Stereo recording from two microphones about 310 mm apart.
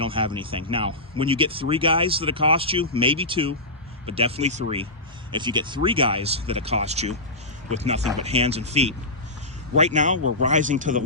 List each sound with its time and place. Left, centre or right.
0.0 s speech: centre